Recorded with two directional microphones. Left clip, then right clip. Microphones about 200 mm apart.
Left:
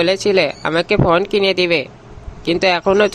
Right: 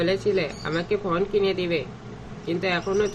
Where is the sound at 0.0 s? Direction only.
60° left (ahead or behind).